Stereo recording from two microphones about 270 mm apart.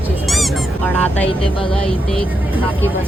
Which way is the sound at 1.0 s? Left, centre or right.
Centre.